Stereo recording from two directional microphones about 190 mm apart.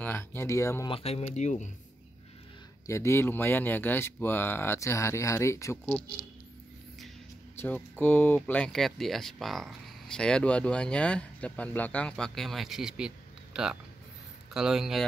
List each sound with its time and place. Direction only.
0.0 s speech: 10° left (ahead or behind)
0.9 s speech: 30° left (ahead or behind)
2.9 s speech: 15° left (ahead or behind)
7.5 s speech: 10° left (ahead or behind)